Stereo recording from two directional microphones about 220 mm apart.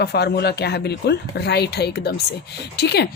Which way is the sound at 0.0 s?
45° left (ahead or behind).